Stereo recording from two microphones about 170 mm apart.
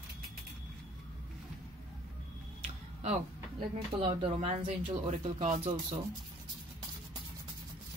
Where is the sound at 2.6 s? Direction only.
40° right (ahead or behind).